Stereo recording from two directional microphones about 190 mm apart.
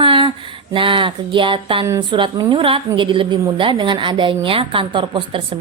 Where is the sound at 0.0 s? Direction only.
25° right (ahead or behind).